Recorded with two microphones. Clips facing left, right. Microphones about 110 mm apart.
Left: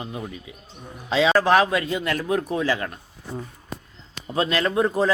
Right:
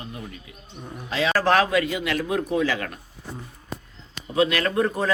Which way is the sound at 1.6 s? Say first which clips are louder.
Even; 25° left (ahead or behind).